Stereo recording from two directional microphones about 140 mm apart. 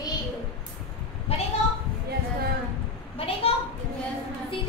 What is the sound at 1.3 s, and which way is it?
Speech, 45° left (ahead or behind).